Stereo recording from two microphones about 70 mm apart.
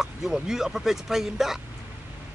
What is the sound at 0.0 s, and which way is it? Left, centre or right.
A man's voice, centre.